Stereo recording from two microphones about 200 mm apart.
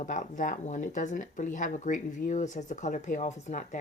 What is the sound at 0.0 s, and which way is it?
A woman's voice, 40° left (ahead or behind).